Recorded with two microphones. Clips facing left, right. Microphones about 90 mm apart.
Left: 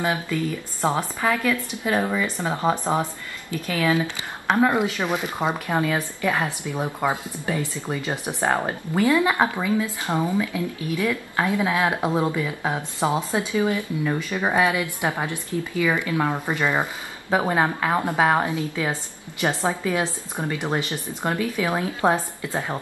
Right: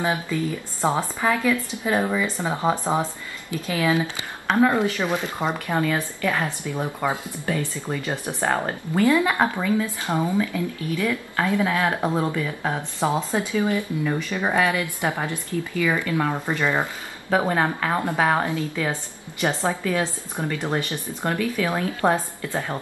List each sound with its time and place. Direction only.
0.0 s a woman's voice: 20° right (ahead or behind)
2.7 s a woman's voice: 15° left (ahead or behind)
3.4 s speech: 20° right (ahead or behind)
4.5 s a woman's voice: 10° left (ahead or behind)